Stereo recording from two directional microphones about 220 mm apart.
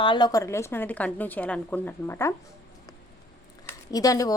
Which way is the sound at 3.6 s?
15° left (ahead or behind).